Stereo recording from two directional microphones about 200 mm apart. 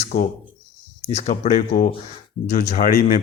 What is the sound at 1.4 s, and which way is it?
A man's voice, 45° left (ahead or behind).